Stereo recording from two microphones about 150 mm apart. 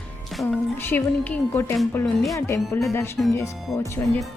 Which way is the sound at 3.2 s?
5° left (ahead or behind).